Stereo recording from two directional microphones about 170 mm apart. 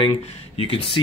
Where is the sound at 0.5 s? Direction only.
35° left (ahead or behind).